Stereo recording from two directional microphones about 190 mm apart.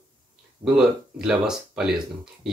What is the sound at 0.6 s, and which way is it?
Speech, 5° right (ahead or behind).